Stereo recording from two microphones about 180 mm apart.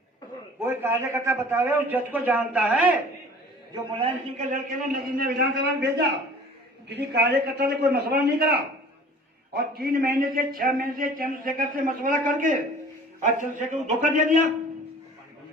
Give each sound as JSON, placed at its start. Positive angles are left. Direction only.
{"t": 0.6, "sound": "a man's voice", "side_deg": -10}
{"t": 3.7, "sound": "a man's voice", "side_deg": -30}
{"t": 4.7, "sound": "a man's voice", "side_deg": -55}